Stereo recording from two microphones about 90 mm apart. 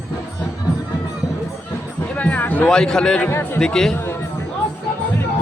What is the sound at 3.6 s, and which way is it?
Speech, 5° left (ahead or behind).